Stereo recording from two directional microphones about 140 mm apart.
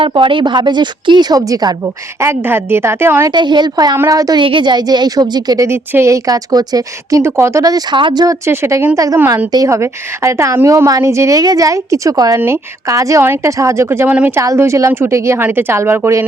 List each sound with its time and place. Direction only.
0.0 s a woman's voice: 35° right (ahead or behind)
2.2 s a woman's voice: 15° right (ahead or behind)
3.3 s a woman's voice: 30° right (ahead or behind)
5.6 s speech: 15° right (ahead or behind)